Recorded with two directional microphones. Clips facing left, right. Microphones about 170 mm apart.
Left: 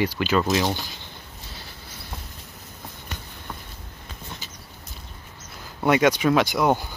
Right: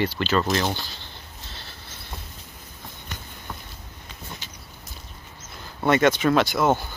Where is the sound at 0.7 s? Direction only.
15° left (ahead or behind).